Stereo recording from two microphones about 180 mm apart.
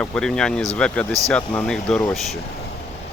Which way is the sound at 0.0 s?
5° left (ahead or behind).